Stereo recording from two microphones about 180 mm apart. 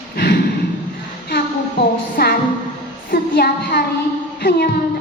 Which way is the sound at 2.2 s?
60° left (ahead or behind).